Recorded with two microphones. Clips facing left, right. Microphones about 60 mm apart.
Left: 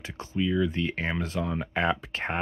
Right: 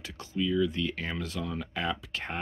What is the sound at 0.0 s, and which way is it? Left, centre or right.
Speech, left.